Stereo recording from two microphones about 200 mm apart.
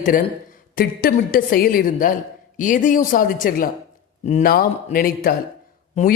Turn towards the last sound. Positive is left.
turn(degrees=35)  # may be behind; listen again after turning